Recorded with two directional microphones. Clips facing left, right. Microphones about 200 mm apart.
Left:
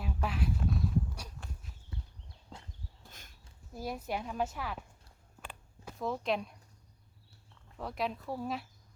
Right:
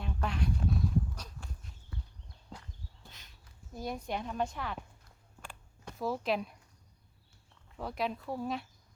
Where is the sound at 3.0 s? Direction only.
50° left (ahead or behind).